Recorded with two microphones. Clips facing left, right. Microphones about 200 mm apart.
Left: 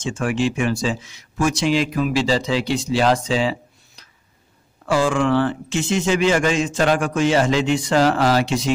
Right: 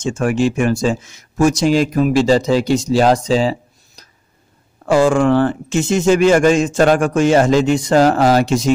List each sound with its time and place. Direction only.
0.0 s speech: 45° right (ahead or behind)